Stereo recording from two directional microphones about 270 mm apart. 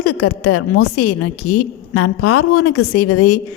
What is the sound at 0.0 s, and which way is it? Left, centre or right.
A woman's voice, left.